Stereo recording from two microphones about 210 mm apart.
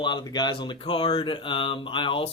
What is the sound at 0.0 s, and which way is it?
Speech, 20° left (ahead or behind).